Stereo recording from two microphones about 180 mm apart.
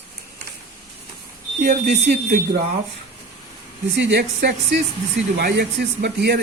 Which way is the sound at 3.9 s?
75° right (ahead or behind).